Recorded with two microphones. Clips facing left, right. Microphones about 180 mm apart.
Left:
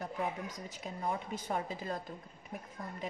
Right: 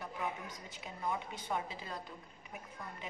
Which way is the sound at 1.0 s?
40° left (ahead or behind).